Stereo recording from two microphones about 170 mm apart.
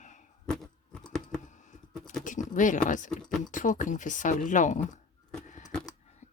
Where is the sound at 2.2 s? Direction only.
50° left (ahead or behind).